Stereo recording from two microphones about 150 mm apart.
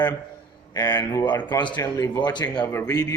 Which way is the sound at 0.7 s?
25° left (ahead or behind).